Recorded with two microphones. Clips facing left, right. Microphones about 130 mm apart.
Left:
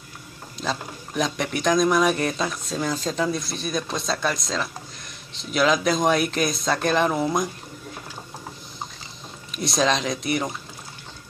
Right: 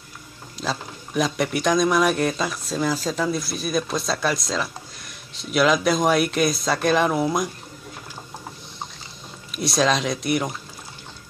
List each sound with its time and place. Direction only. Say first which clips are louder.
0.6 s speech: even; 5° right (ahead or behind)
9.5 s speech: right 1 dB; centre (ahead or behind)